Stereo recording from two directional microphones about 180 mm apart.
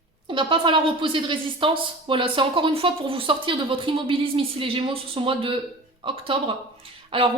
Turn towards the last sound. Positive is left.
turn(degrees=-30)  # may be behind; listen again after turning